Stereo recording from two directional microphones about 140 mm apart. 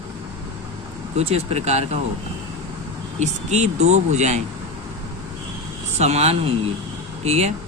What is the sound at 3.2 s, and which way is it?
Speech, 55° right (ahead or behind).